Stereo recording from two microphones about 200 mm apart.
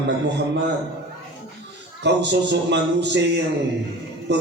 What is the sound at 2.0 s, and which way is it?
A man's voice, 60° right (ahead or behind).